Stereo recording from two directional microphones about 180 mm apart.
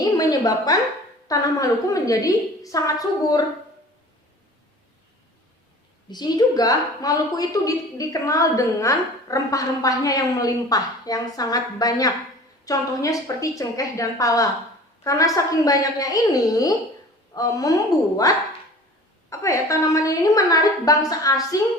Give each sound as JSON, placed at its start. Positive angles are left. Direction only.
{"t": 0.0, "sound": "a sound", "side_deg": 20}
{"t": 1.3, "sound": "a woman's voice", "side_deg": 20}
{"t": 6.1, "sound": "a woman's voice", "side_deg": 25}
{"t": 19.3, "sound": "a woman's voice", "side_deg": 15}